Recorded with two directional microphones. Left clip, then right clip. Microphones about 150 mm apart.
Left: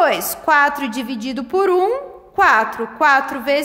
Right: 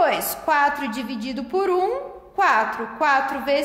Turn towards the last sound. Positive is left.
turn(degrees=45)  # may be behind; listen again after turning